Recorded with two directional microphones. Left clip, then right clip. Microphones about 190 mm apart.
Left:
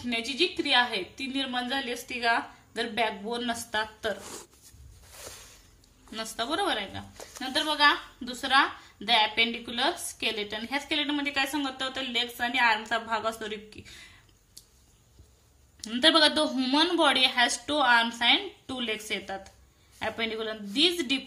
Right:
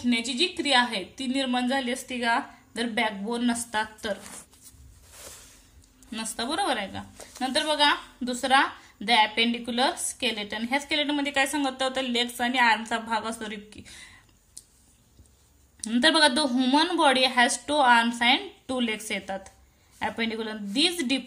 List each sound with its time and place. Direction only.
0.4 s a woman's voice: 20° right (ahead or behind)
6.0 s a woman's voice: 20° right (ahead or behind)
15.8 s a woman's voice: 20° right (ahead or behind)